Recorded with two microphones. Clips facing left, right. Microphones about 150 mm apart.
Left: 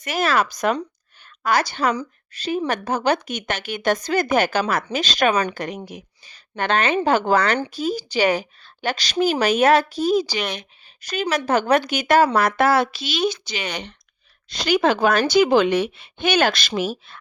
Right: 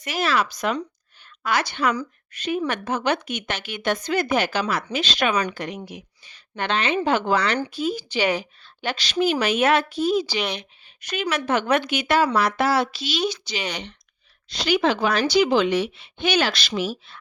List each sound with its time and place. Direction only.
0.0 s a woman's voice: 45° left (ahead or behind)